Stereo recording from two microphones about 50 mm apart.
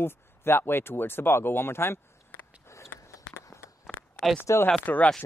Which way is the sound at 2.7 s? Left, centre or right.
Left.